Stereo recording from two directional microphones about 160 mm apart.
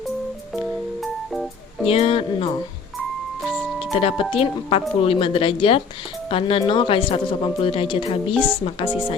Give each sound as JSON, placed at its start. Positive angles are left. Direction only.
{"t": 1.3, "sound": "music", "side_deg": 0}
{"t": 1.9, "sound": "speech", "side_deg": 35}
{"t": 3.9, "sound": "speech", "side_deg": 35}